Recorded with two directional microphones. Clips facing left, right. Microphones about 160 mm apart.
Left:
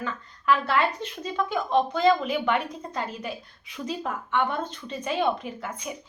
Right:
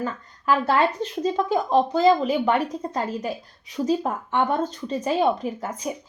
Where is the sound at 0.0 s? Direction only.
40° right (ahead or behind).